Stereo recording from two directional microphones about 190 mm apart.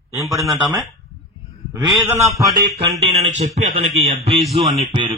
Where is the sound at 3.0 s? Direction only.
35° right (ahead or behind).